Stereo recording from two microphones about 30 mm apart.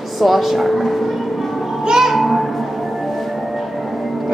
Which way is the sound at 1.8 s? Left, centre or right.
Right.